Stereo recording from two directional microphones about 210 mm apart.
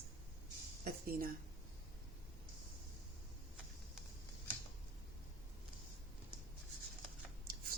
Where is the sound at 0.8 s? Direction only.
45° right (ahead or behind).